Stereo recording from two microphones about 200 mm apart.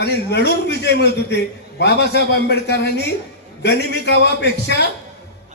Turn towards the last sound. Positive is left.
turn(degrees=55)  # may be behind; listen again after turning